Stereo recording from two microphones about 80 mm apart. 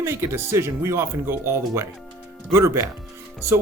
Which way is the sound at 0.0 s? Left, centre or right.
Right.